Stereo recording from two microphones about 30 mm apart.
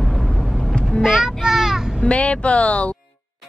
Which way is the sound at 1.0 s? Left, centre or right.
Centre.